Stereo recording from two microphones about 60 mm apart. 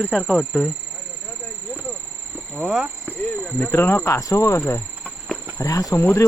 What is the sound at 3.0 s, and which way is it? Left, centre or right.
Speech, left.